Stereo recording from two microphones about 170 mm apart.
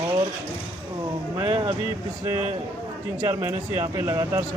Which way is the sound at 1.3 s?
30° right (ahead or behind).